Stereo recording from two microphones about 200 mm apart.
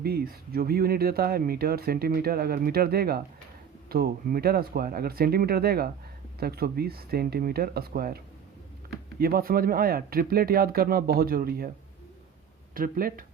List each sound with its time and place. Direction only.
0.0 s speech: 50° right (ahead or behind)
12.7 s speech: 45° right (ahead or behind)